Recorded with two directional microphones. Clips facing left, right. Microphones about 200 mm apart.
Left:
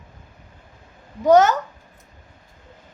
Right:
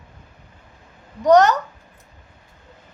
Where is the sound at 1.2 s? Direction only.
5° left (ahead or behind).